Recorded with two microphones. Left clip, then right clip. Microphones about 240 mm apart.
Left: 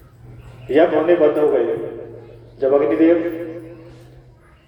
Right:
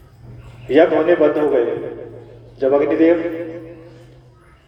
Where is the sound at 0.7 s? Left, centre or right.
Right.